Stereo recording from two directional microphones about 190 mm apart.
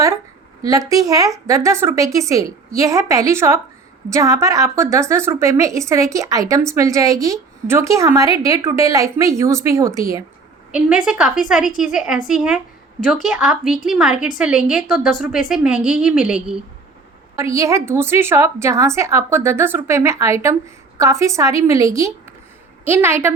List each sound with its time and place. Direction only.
0.6 s a woman's voice: 20° right (ahead or behind)
10.7 s a woman's voice: 5° right (ahead or behind)
17.3 s a woman's voice: 15° right (ahead or behind)